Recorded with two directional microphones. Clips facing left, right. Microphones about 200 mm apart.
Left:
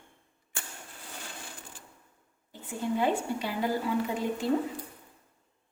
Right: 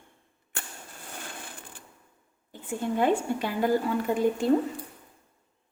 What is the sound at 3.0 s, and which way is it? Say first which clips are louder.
A woman's voice: right 5 dB; 50° right (ahead or behind).